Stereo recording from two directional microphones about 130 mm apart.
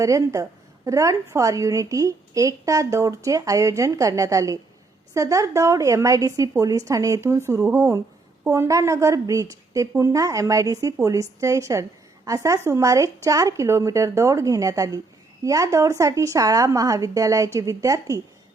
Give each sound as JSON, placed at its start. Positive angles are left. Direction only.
{"t": 0.0, "sound": "a woman's voice", "side_deg": -25}